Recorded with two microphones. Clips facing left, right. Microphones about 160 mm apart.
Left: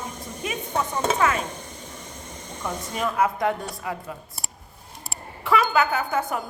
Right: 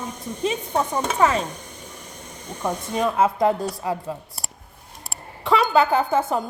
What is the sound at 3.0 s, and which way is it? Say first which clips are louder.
A woman's voice: right 4 dB; 25° right (ahead or behind).